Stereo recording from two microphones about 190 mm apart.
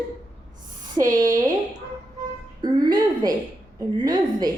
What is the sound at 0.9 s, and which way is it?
Speech, 20° right (ahead or behind).